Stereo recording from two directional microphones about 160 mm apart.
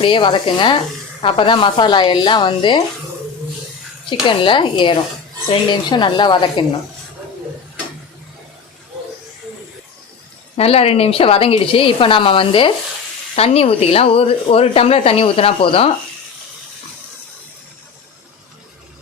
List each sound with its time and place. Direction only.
0.0 s speech: 30° left (ahead or behind)
4.1 s speech: 30° left (ahead or behind)
10.6 s speech: 40° left (ahead or behind)